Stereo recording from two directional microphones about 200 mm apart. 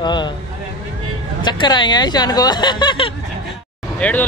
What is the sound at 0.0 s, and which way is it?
Vehicle, 20° left (ahead or behind).